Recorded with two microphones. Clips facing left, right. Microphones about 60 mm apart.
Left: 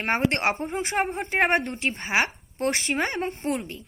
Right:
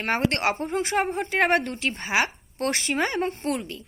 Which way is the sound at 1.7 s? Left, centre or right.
Left.